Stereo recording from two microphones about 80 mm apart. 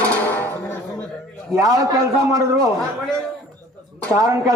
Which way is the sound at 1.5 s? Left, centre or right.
Right.